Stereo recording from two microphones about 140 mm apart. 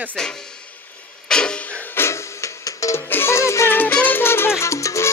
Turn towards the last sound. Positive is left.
turn(degrees=20)  # may be behind; listen again after turning